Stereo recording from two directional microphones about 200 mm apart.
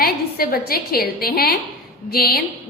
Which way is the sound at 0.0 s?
50° left (ahead or behind).